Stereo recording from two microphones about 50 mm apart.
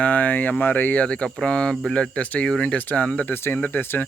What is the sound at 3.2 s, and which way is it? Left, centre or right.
Speech, left.